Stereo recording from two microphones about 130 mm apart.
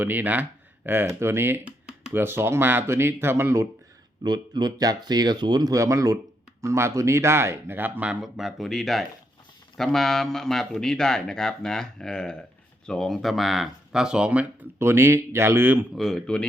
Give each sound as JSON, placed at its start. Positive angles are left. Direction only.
{"t": 0.0, "sound": "speech", "side_deg": -15}
{"t": 4.2, "sound": "speech", "side_deg": -35}
{"t": 16.0, "sound": "speech", "side_deg": 5}